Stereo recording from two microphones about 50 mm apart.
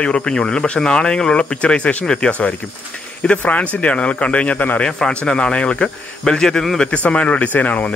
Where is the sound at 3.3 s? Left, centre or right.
Left.